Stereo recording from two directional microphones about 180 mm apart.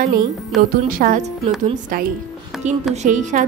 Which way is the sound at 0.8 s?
50° right (ahead or behind).